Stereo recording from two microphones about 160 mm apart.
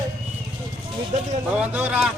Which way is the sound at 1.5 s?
10° right (ahead or behind).